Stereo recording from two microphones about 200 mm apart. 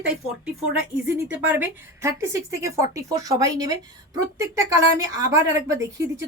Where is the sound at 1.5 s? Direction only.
15° right (ahead or behind).